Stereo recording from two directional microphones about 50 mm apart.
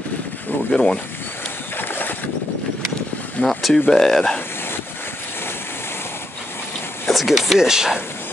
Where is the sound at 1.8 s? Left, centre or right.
Left.